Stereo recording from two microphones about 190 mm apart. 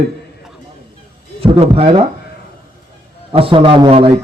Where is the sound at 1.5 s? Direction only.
30° right (ahead or behind).